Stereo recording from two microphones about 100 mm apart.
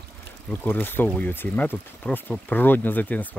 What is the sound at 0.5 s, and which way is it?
Speech, 20° left (ahead or behind).